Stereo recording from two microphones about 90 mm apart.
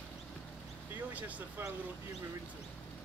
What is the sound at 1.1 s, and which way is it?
Speech, 15° right (ahead or behind).